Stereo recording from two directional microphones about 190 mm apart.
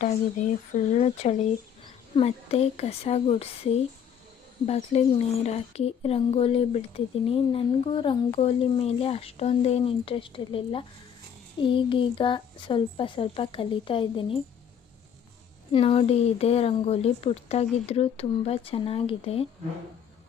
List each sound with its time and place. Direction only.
0.0 s speech: 40° left (ahead or behind)
15.7 s speech: 30° left (ahead or behind)